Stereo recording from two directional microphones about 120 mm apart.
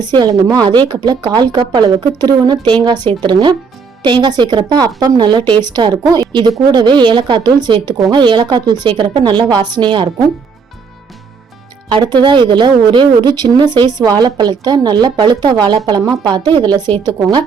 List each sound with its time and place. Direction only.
0.0 s a woman's voice: 35° right (ahead or behind)
11.9 s a woman's voice: 40° right (ahead or behind)